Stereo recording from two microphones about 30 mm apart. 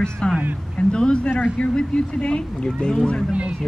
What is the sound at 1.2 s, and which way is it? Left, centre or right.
Speech, left.